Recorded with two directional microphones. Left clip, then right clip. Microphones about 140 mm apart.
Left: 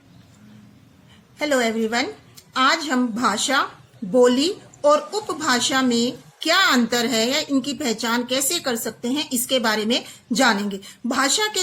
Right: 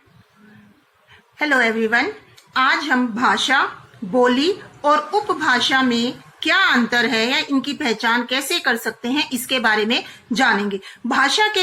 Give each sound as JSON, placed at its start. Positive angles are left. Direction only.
{"t": 1.4, "sound": "a woman's voice", "side_deg": 40}